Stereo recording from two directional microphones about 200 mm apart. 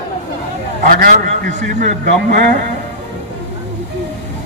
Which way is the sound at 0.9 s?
45° right (ahead or behind).